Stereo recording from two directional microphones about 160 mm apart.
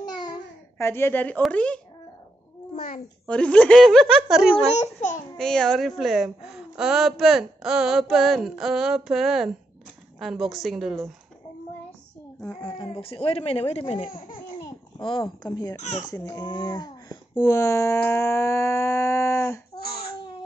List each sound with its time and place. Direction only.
0.2 s a sound: 20° left (ahead or behind)
1.4 s speech: 10° left (ahead or behind)
3.3 s a woman's voice: 5° left (ahead or behind)
12.6 s speech: 35° left (ahead or behind)
15.7 s speech: 45° left (ahead or behind)
16.1 s speech: 25° left (ahead or behind)